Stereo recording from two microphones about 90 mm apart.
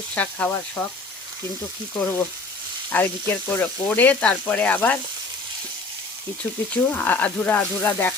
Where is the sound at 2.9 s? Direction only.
20° left (ahead or behind).